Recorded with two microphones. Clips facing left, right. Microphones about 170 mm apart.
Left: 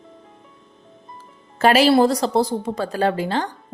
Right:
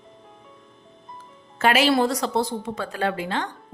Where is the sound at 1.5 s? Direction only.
35° left (ahead or behind).